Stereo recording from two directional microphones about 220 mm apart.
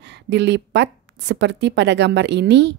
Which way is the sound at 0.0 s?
50° right (ahead or behind).